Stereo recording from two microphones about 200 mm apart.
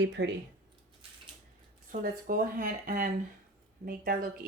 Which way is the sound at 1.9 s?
45° right (ahead or behind).